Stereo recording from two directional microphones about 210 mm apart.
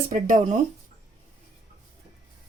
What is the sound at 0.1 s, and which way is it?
Speech, 40° right (ahead or behind).